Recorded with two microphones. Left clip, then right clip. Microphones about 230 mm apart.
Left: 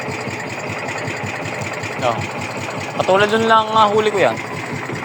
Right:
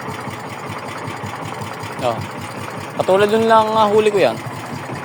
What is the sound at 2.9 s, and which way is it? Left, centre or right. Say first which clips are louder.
Speech: even; right.